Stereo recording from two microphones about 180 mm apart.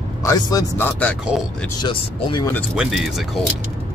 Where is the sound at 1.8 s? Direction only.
30° left (ahead or behind).